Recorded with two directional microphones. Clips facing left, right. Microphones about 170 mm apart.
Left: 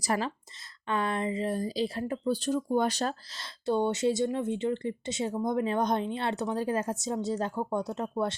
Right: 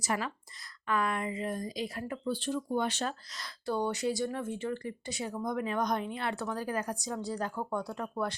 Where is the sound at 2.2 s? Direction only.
40° left (ahead or behind); by 8.3 s 25° left (ahead or behind).